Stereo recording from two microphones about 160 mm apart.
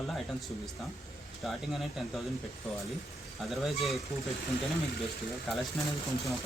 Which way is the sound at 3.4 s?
Centre (ahead or behind).